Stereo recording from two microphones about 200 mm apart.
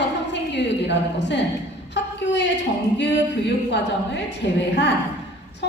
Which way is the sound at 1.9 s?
60° left (ahead or behind).